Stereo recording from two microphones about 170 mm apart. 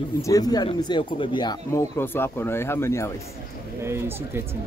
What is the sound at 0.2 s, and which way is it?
Speech, 20° left (ahead or behind).